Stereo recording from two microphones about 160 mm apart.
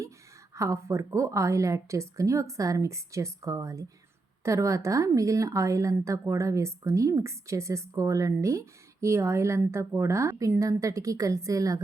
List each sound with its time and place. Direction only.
0.5 s speech: 20° right (ahead or behind)